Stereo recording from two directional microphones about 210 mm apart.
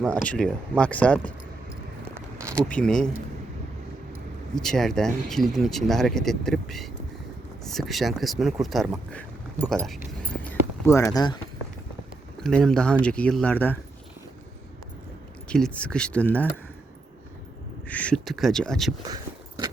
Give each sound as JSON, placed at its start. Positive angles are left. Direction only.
{"t": 0.0, "sound": "speech", "side_deg": 5}
{"t": 2.6, "sound": "speech", "side_deg": 5}
{"t": 4.5, "sound": "speech", "side_deg": 0}
{"t": 9.8, "sound": "a sound", "side_deg": 0}
{"t": 12.4, "sound": "speech", "side_deg": 5}
{"t": 15.4, "sound": "speech", "side_deg": 5}
{"t": 17.8, "sound": "speech", "side_deg": 5}
{"t": 19.0, "sound": "a sound", "side_deg": -20}